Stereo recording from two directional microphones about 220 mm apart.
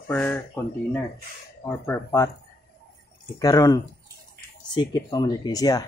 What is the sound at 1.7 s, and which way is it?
Speech, 10° left (ahead or behind).